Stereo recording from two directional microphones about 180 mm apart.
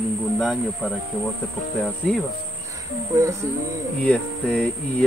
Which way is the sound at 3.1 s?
15° right (ahead or behind).